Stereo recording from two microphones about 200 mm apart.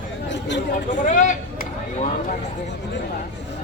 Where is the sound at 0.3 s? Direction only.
60° left (ahead or behind).